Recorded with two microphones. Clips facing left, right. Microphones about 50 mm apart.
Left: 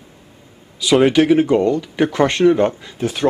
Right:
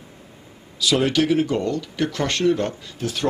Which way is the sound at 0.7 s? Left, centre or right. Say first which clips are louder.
Left 7 dB; left.